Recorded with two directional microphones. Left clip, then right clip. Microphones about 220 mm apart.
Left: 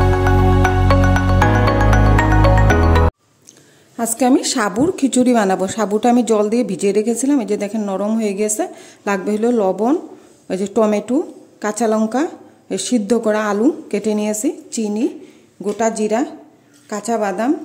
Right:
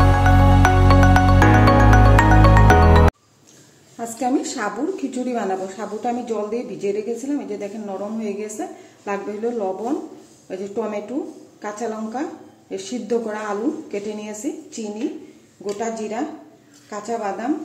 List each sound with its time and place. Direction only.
0.6 s music: centre (ahead or behind)
3.9 s a woman's voice: 45° left (ahead or behind)